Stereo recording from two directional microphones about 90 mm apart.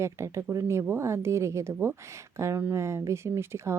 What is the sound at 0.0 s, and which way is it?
A woman's voice, 30° right (ahead or behind).